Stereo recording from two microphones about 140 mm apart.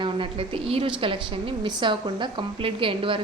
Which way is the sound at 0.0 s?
35° right (ahead or behind).